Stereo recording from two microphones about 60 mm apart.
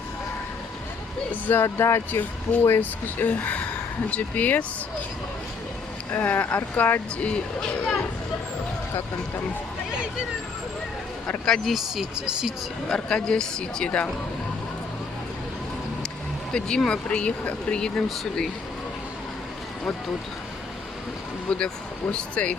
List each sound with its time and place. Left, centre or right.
1.3 s speech: left
1.6 s speech: left
2.1 s speech: left
6.1 s speech: left
11.3 s speech: centre
11.7 s speech: centre
12.9 s speech: centre
16.5 s speech: centre
21.5 s speech: centre